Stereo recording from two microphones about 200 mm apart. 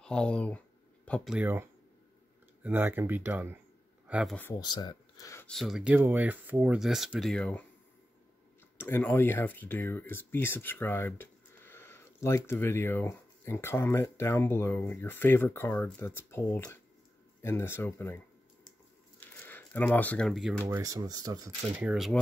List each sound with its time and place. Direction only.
0.0 s speech: 5° left (ahead or behind)
4.4 s speech: 15° left (ahead or behind)
5.5 s speech: centre (ahead or behind)
8.7 s speech: 10° left (ahead or behind)
19.4 s speech: 10° left (ahead or behind)
20.6 s speech: 15° right (ahead or behind)
21.8 s speech: centre (ahead or behind)